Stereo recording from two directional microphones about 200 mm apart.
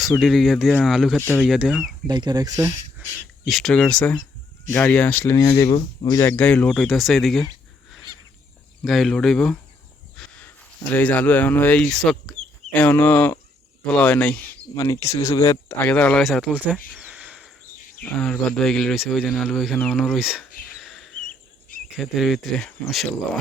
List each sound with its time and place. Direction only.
0.0 s speech: centre (ahead or behind)
1.2 s speech: 10° left (ahead or behind)
1.5 s speech: 5° right (ahead or behind)
2.0 s speech: 20° right (ahead or behind)
3.4 s speech: centre (ahead or behind); by 6.2 s 20° left (ahead or behind)
6.2 s speech: 5° left (ahead or behind)
8.8 s speech: centre (ahead or behind)
10.2 s a sound: 5° left (ahead or behind)
10.9 s speech: 5° left (ahead or behind)
16.9 s a sound: 5° right (ahead or behind)
18.0 s speech: 5° left (ahead or behind)
20.7 s a sound: centre (ahead or behind)
21.9 s speech: centre (ahead or behind)